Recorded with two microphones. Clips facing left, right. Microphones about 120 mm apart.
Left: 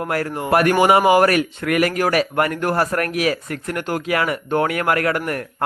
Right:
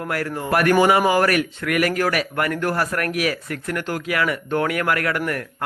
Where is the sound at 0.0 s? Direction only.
25° left (ahead or behind).